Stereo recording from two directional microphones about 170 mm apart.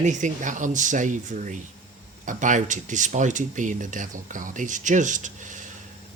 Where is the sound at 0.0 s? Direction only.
45° right (ahead or behind).